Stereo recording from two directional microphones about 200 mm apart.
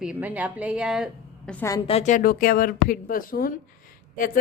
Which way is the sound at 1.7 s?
20° left (ahead or behind).